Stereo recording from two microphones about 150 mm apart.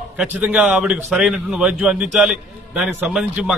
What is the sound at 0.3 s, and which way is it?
A man's voice, 10° right (ahead or behind).